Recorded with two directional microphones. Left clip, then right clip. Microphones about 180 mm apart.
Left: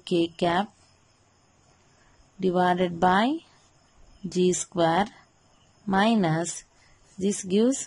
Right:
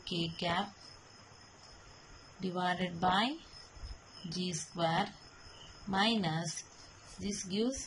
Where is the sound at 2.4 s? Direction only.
50° left (ahead or behind).